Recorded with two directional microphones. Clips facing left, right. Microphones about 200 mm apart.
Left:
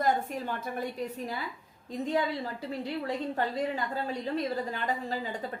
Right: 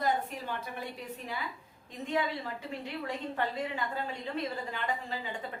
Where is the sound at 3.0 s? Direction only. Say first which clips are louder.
Left 1 dB; 40° left (ahead or behind).